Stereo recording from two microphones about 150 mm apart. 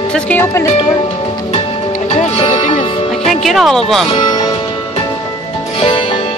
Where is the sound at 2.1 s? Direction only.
40° left (ahead or behind).